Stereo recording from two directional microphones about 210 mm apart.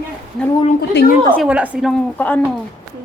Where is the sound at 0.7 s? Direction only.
50° left (ahead or behind).